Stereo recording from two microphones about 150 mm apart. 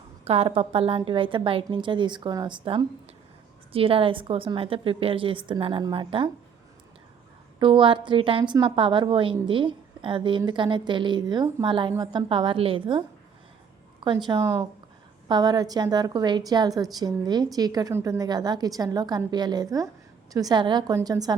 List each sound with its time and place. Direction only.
0.3 s a woman's voice: 40° right (ahead or behind)
7.6 s a woman's voice: 35° right (ahead or behind)